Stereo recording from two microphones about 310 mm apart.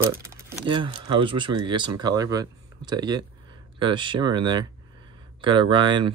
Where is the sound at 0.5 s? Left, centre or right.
Centre.